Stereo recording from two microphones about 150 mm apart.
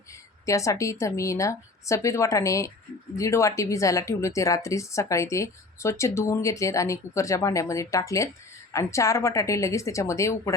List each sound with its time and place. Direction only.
0.4 s a woman's voice: 20° left (ahead or behind)